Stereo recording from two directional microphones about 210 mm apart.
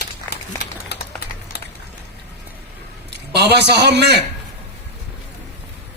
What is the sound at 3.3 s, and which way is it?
Speech, 50° right (ahead or behind).